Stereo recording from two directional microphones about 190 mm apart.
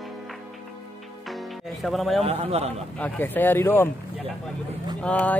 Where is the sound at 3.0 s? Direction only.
10° left (ahead or behind).